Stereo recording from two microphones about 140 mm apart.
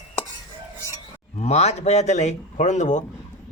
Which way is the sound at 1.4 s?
50° left (ahead or behind).